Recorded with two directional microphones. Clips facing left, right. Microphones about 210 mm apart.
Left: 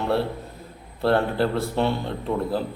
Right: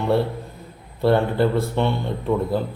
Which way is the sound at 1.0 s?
Centre (ahead or behind).